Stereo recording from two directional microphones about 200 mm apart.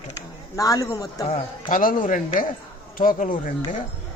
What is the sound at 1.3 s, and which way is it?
Speech, 35° left (ahead or behind).